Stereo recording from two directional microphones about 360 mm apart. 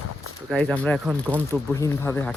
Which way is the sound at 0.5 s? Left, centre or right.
Centre.